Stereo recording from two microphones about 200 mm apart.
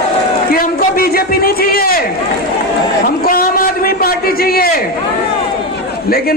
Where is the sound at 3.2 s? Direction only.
45° left (ahead or behind).